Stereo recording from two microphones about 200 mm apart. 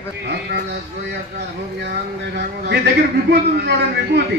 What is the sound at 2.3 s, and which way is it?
A man's voice, 55° right (ahead or behind).